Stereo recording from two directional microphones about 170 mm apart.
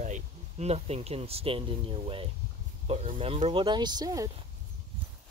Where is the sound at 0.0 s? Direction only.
45° right (ahead or behind); by 4.3 s 20° right (ahead or behind).